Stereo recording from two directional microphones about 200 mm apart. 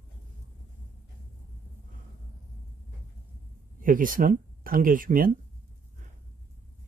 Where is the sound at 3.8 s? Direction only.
45° right (ahead or behind).